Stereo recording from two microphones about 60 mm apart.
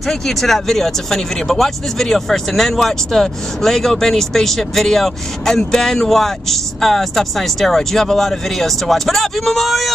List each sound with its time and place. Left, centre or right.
0.0 s speech: centre